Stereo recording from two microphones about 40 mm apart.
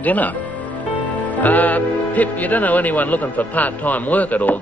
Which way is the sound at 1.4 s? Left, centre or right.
Left.